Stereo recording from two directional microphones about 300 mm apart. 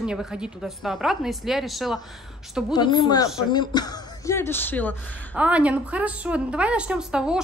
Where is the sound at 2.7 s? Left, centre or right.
Centre.